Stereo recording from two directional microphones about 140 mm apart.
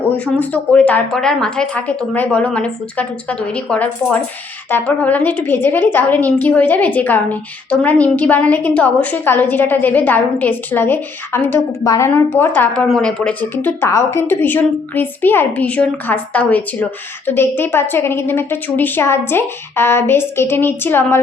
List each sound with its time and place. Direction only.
0.3 s a woman's voice: 10° left (ahead or behind)